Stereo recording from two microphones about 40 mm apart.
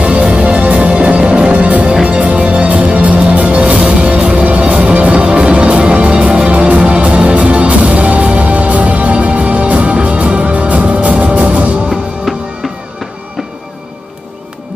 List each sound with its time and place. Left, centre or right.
0.0 s music: right
12.3 s music: centre